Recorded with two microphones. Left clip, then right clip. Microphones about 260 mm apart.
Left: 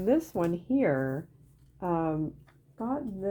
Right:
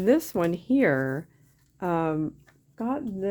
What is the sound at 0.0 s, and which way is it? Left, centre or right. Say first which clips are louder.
Speech: right 4 dB; right.